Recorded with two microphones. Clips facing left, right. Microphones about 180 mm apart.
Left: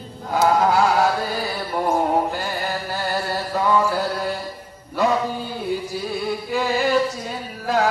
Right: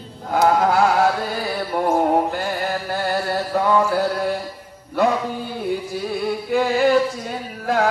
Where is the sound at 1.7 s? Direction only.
60° right (ahead or behind).